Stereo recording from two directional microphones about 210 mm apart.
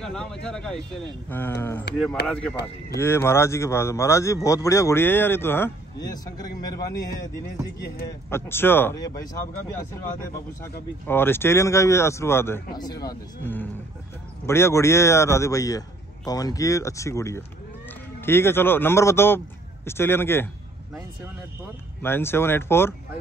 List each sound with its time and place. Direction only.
0.0 s speech: 5° left (ahead or behind)
8.3 s speech: 10° left (ahead or behind)
22.0 s speech: 10° left (ahead or behind)